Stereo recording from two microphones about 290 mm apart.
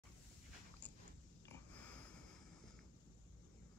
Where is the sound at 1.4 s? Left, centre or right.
Centre.